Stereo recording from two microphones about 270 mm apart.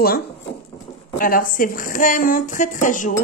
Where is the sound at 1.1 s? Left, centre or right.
Left.